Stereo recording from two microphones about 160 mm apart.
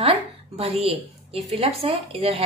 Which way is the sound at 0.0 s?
35° right (ahead or behind).